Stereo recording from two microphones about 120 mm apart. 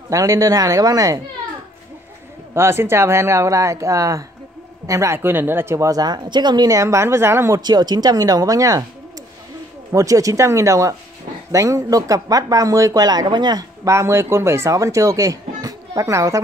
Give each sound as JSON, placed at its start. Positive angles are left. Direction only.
{"t": 0.1, "sound": "speech", "side_deg": -30}
{"t": 2.5, "sound": "speech", "side_deg": -20}
{"t": 7.6, "sound": "speech", "side_deg": -35}
{"t": 9.9, "sound": "speech", "side_deg": -30}